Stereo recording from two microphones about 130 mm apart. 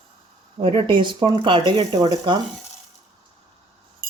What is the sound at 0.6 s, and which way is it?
Speech, 45° right (ahead or behind).